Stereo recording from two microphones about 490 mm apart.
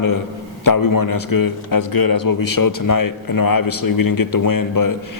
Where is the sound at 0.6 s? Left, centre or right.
Left.